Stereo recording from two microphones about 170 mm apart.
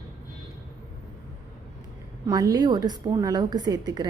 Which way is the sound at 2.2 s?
20° right (ahead or behind).